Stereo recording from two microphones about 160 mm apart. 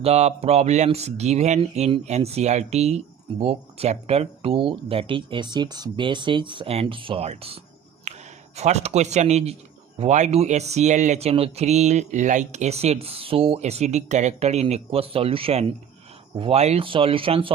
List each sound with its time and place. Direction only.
0.0 s speech: 40° right (ahead or behind)
8.1 s a sound: 45° right (ahead or behind)
8.5 s speech: 45° right (ahead or behind)